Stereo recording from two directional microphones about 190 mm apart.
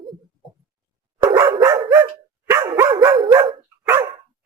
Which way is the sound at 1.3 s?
20° right (ahead or behind).